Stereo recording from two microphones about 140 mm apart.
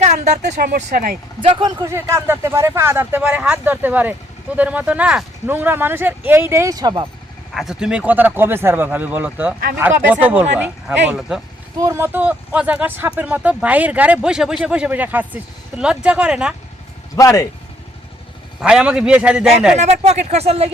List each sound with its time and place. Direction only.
0.1 s speech: 55° right (ahead or behind)
0.7 s speech: 70° right (ahead or behind)
1.4 s speech: 35° right (ahead or behind)
1.8 s speech: 20° right (ahead or behind)
7.5 s speech: centre (ahead or behind)
11.8 s speech: 20° right (ahead or behind)
17.2 s speech: 20° left (ahead or behind)
18.6 s speech: 5° right (ahead or behind)
19.7 s speech: 55° right (ahead or behind)